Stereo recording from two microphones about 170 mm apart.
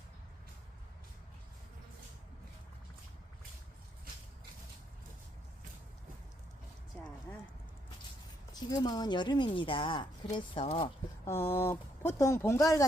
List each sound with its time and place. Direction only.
8.5 s speech: 25° left (ahead or behind)
11.3 s speech: 15° left (ahead or behind)